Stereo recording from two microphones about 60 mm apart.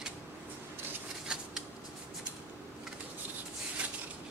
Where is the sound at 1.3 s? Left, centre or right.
Centre.